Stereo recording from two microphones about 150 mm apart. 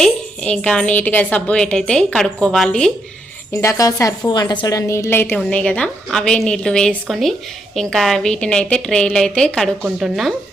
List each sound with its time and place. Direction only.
0.0 s a woman's voice: 5° left (ahead or behind)
3.5 s a woman's voice: 20° left (ahead or behind); by 10.3 s centre (ahead or behind)